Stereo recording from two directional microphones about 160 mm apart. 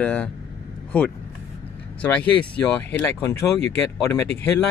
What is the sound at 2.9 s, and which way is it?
Speech, 15° left (ahead or behind).